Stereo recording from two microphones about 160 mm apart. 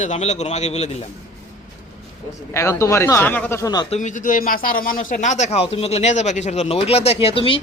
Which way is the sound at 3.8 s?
45° left (ahead or behind).